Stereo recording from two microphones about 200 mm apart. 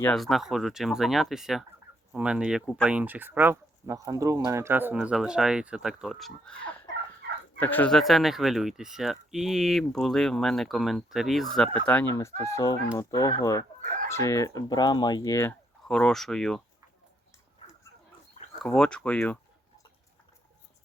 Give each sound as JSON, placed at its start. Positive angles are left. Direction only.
{"t": 0.0, "sound": "speech", "side_deg": 0}
{"t": 12.4, "sound": "speech", "side_deg": 15}
{"t": 18.6, "sound": "speech", "side_deg": 5}